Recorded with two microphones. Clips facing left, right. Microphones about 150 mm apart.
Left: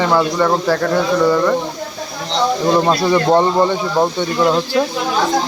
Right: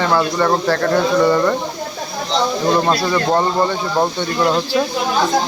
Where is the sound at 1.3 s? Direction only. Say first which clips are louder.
Even; centre (ahead or behind).